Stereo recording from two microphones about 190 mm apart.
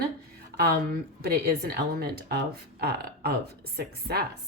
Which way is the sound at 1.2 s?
55° right (ahead or behind).